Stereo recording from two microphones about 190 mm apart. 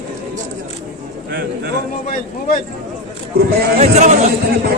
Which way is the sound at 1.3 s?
55° right (ahead or behind).